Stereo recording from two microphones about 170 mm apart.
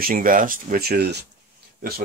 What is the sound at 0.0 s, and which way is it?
Speech, 55° right (ahead or behind).